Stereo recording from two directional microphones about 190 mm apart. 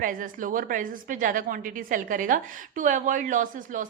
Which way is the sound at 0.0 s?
45° right (ahead or behind).